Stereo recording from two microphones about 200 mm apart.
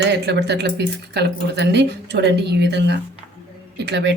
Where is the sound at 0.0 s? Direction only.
60° right (ahead or behind).